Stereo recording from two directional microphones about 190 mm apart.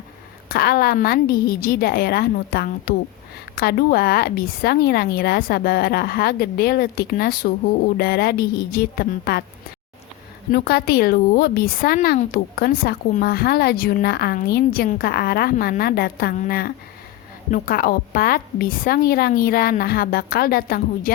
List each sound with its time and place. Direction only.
0.4 s a woman's voice: 50° left (ahead or behind)
10.5 s a woman's voice: 55° left (ahead or behind)